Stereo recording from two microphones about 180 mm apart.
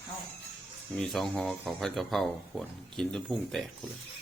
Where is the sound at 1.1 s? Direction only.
5° left (ahead or behind).